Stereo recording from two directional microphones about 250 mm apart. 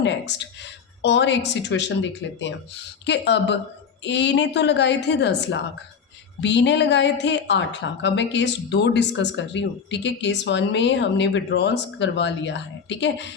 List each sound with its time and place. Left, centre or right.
0.0 s a woman's voice: left